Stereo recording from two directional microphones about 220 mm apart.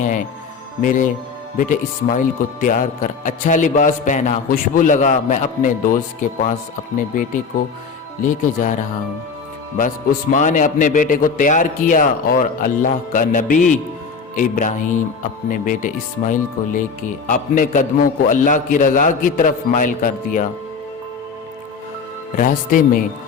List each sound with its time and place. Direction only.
0.0 s speech: 35° left (ahead or behind)
10.3 s speech: 35° left (ahead or behind)
22.4 s speech: 40° left (ahead or behind)